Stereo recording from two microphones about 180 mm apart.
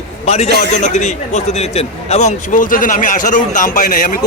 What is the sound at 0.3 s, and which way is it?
A man's voice, 35° left (ahead or behind).